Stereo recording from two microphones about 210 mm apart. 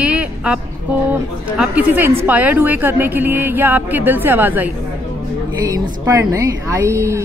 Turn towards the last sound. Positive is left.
turn(degrees=-15)  # may be behind; listen again after turning